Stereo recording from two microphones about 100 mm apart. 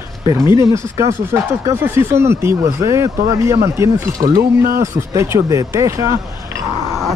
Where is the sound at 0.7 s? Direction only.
30° right (ahead or behind).